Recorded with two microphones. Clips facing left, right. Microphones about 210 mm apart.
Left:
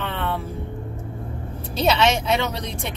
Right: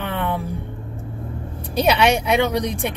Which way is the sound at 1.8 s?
15° right (ahead or behind).